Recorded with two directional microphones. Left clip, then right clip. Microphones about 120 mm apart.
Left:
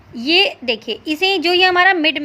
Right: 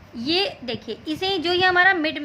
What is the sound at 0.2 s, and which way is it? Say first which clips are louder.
A woman's voice: left 8 dB; 40° left (ahead or behind).